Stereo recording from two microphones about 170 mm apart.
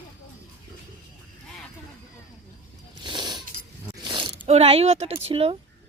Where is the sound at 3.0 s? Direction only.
25° right (ahead or behind).